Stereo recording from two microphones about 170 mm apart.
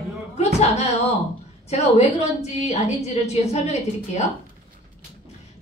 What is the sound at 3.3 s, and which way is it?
Speech, 40° left (ahead or behind).